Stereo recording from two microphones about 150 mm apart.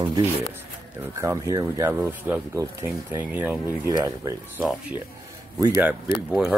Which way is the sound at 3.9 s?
25° right (ahead or behind).